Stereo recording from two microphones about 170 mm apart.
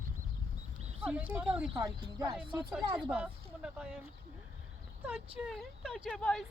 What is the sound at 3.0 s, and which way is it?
Speech, 10° right (ahead or behind).